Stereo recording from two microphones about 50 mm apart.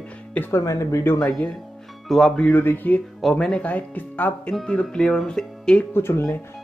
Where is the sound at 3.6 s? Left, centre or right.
Left.